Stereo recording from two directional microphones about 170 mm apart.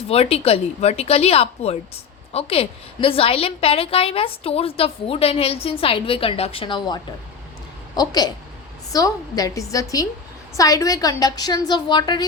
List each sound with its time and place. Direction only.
0.1 s a woman's voice: 35° left (ahead or behind)